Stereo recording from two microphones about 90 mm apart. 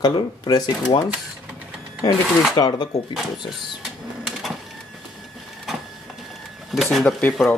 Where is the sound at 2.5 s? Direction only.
50° left (ahead or behind).